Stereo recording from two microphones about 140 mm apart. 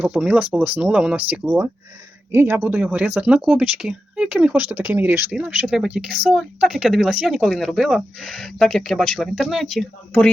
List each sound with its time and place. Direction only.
0.0 s speech: 5° right (ahead or behind)